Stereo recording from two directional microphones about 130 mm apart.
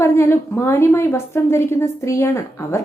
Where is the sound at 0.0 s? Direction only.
20° left (ahead or behind).